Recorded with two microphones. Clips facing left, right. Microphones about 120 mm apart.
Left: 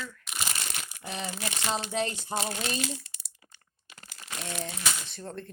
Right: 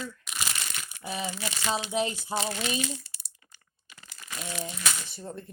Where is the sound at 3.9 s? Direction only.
25° left (ahead or behind).